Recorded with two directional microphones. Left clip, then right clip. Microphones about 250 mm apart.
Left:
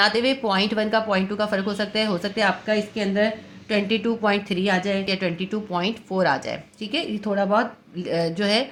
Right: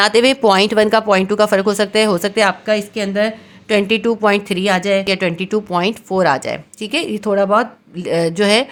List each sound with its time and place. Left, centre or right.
0.0 s speech: right